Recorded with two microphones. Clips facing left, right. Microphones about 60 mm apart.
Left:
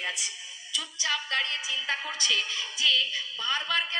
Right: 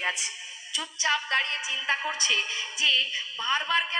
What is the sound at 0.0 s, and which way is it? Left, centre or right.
A woman's voice, right.